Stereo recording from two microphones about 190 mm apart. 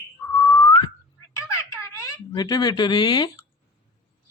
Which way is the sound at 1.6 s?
15° left (ahead or behind).